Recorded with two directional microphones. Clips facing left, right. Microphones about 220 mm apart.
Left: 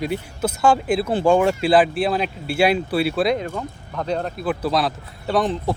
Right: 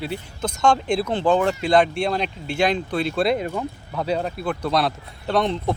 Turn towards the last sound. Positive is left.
turn(degrees=5)  # may be behind; listen again after turning